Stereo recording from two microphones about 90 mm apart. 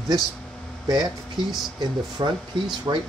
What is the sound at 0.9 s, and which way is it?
Speech, 45° right (ahead or behind).